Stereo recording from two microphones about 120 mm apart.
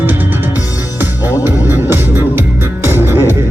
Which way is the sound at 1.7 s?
20° right (ahead or behind).